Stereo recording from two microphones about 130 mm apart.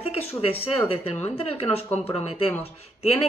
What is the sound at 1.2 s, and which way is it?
Speech, 50° left (ahead or behind).